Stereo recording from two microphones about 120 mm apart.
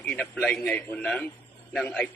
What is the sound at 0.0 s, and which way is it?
A man's voice, 10° left (ahead or behind).